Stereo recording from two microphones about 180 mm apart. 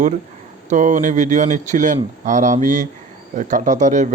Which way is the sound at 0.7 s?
45° right (ahead or behind).